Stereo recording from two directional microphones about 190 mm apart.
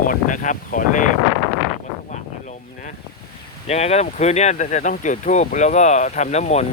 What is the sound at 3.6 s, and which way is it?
Speech, 35° left (ahead or behind).